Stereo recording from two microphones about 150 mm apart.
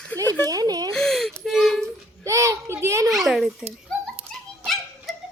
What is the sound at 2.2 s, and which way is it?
Speech, 20° right (ahead or behind).